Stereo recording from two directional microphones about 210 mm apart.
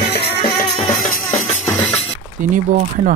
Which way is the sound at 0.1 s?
25° left (ahead or behind).